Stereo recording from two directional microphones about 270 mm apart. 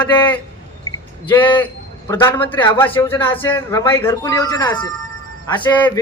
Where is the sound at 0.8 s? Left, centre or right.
Centre.